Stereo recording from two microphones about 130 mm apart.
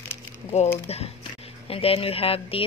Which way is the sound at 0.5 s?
55° left (ahead or behind).